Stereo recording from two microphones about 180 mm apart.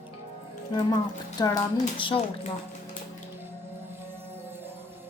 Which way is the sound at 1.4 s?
20° left (ahead or behind).